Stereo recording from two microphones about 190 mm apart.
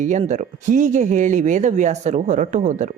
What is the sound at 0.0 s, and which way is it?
A woman's voice, 40° right (ahead or behind).